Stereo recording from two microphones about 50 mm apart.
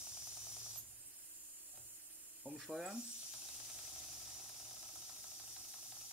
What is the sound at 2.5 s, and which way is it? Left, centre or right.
Speech, centre.